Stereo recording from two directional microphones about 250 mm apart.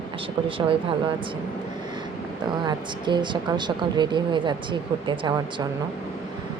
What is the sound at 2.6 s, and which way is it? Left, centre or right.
Speech, centre.